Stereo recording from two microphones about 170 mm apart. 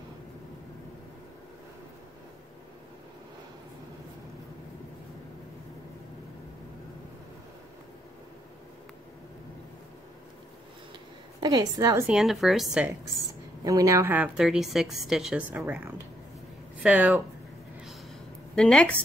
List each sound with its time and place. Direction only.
11.4 s a woman's voice: 20° right (ahead or behind)
12.1 s a woman's voice: centre (ahead or behind)
13.7 s a woman's voice: 20° right (ahead or behind)
18.5 s a woman's voice: 5° left (ahead or behind)